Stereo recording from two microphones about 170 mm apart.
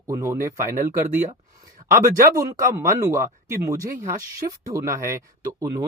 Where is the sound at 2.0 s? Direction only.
20° right (ahead or behind).